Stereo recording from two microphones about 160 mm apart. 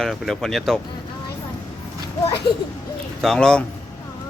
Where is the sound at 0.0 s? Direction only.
Centre (ahead or behind).